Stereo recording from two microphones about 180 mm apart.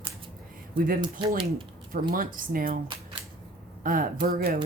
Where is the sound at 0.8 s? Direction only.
50° right (ahead or behind).